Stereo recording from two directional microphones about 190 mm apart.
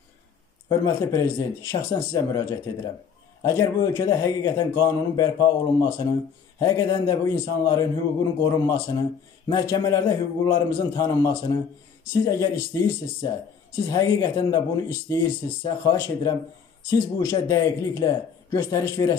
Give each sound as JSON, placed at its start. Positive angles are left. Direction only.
{"t": 0.7, "sound": "a man's voice", "side_deg": 20}
{"t": 3.4, "sound": "a man's voice", "side_deg": 15}